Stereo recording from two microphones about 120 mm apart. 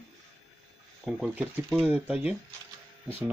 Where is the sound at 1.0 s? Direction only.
5° left (ahead or behind).